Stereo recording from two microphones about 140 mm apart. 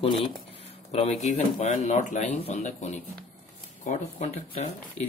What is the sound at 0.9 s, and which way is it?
Speech, 50° left (ahead or behind).